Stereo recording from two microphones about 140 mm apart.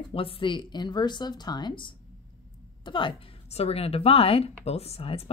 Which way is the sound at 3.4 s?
45° left (ahead or behind).